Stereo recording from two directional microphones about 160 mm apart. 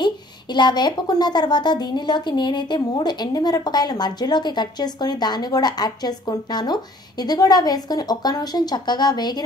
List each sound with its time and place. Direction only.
0.0 s a woman's voice: 25° left (ahead or behind)